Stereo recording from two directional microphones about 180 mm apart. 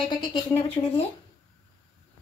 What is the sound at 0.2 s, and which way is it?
Speech, 25° left (ahead or behind).